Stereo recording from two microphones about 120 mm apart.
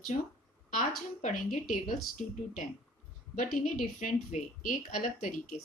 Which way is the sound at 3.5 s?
90° left.